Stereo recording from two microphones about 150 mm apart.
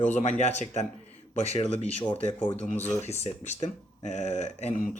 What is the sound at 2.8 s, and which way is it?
Speech, 45° left (ahead or behind).